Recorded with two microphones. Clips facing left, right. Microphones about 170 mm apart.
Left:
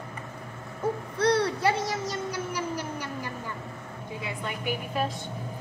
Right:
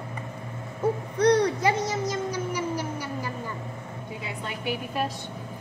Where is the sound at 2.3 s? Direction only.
10° right (ahead or behind).